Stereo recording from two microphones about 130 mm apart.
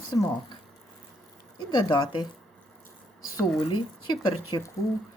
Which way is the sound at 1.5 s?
35° left (ahead or behind).